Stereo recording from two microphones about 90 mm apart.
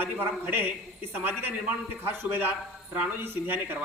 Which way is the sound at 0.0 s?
20° right (ahead or behind).